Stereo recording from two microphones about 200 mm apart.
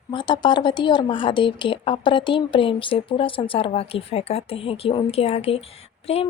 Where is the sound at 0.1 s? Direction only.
25° left (ahead or behind).